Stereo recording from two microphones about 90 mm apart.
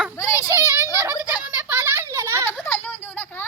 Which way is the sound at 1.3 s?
20° right (ahead or behind).